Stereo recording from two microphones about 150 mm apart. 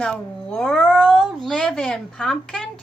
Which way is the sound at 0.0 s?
5° left (ahead or behind).